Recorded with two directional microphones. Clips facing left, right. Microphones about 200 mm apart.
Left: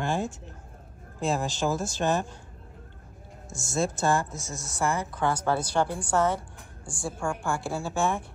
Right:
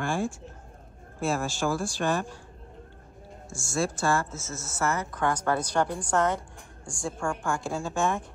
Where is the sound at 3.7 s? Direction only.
20° left (ahead or behind).